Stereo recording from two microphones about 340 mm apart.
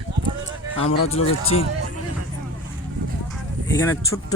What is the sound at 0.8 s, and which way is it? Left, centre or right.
Speech, centre.